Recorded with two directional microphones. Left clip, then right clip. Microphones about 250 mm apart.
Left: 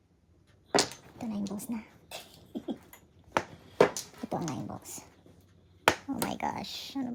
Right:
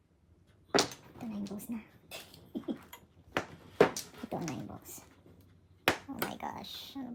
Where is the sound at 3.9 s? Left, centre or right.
Left.